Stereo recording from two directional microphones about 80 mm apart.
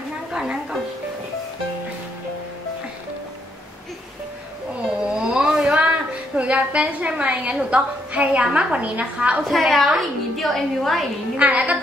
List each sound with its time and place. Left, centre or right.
0.3 s music: centre
5.1 s a sound: centre
7.7 s a woman's voice: centre
9.4 s a woman's voice: centre
11.3 s a woman's voice: centre